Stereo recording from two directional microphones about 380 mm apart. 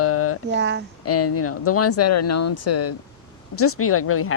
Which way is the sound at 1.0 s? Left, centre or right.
Left.